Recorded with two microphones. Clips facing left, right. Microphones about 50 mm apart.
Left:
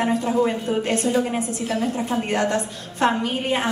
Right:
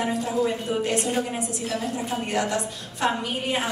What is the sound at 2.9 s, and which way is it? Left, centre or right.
Speech, left.